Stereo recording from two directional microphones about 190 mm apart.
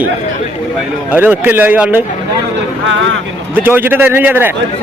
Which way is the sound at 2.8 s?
80° right.